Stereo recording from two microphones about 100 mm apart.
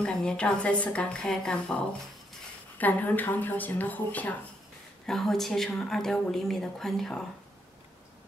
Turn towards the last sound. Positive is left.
turn(degrees=5)  # may be behind; listen again after turning